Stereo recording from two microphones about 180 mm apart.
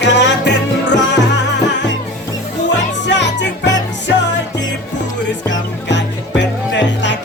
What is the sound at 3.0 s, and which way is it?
Music, 75° left (ahead or behind).